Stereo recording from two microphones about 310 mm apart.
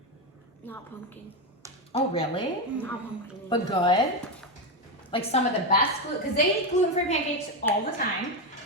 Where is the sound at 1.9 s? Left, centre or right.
Centre.